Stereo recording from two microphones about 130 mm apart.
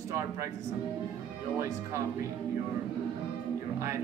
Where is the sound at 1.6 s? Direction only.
25° right (ahead or behind).